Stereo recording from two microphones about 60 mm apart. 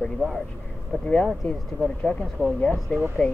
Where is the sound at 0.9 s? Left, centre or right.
Left.